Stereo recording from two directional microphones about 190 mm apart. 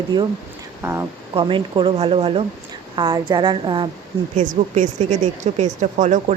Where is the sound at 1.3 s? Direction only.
25° right (ahead or behind).